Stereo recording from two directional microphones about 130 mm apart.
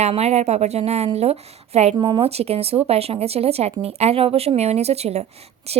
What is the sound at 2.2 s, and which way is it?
Speech, 50° right (ahead or behind).